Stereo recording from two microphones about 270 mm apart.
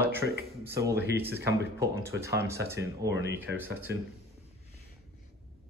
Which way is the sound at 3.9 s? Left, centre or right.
Right.